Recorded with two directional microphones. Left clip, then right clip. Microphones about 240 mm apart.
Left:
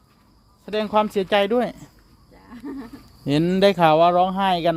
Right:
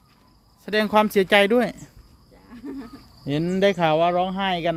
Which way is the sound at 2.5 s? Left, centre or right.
Centre.